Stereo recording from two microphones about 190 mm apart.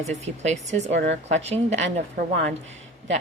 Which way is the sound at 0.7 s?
35° right (ahead or behind).